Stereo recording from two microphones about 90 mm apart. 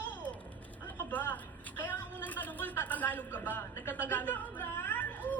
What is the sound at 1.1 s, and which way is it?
A woman's voice, 20° left (ahead or behind).